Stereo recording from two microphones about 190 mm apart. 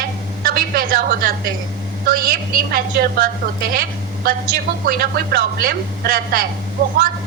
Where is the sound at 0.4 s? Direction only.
50° right (ahead or behind).